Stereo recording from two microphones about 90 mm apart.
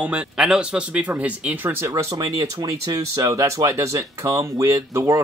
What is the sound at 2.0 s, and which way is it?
Speech, 40° right (ahead or behind).